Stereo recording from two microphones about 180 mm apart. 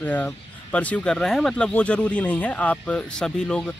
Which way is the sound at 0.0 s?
10° left (ahead or behind).